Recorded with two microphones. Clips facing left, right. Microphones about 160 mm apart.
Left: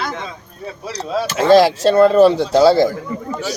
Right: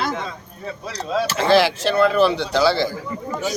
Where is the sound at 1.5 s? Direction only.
40° left (ahead or behind).